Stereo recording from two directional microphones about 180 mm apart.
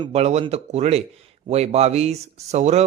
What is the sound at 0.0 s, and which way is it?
Speech, 35° right (ahead or behind).